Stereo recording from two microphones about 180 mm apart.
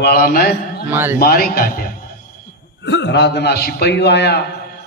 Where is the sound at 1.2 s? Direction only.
55° left (ahead or behind).